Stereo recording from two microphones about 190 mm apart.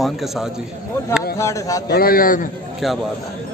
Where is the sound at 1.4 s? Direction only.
15° left (ahead or behind).